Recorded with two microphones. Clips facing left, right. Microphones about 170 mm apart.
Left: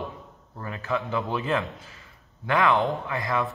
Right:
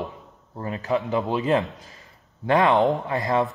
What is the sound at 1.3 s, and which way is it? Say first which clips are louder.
Speech: right 6 dB; 20° right (ahead or behind).